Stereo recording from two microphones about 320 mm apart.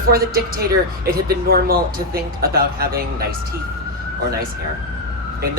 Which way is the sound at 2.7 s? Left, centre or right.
Right.